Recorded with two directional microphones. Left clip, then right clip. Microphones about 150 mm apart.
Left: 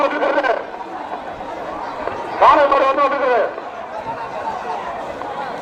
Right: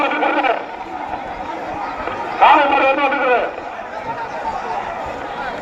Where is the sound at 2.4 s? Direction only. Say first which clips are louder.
Even; 25° left (ahead or behind).